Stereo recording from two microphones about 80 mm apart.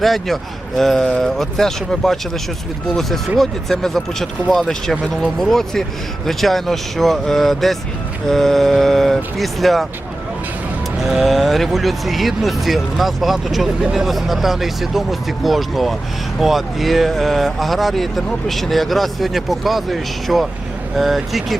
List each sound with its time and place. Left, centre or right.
0.0 s speech: centre
11.0 s speech: centre